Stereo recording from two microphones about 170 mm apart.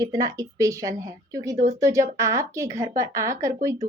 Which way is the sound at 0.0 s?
20° right (ahead or behind).